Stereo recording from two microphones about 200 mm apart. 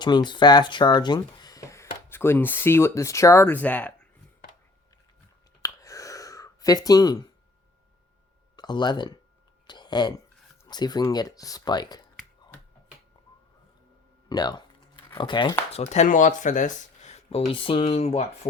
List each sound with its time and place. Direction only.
0.0 s speech: 20° left (ahead or behind)
5.6 s a sound: 15° left (ahead or behind)
8.5 s speech: 20° left (ahead or behind)
9.6 s a sound: 20° left (ahead or behind)
10.6 s speech: 20° left (ahead or behind)
14.3 s speech: 20° left (ahead or behind)
15.7 s speech: 35° left (ahead or behind)